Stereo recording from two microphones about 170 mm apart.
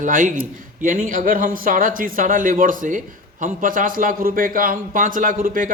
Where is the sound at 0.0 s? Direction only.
50° right (ahead or behind).